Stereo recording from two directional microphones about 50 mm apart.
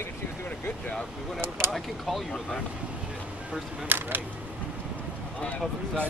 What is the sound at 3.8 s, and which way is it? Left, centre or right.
Speech, right.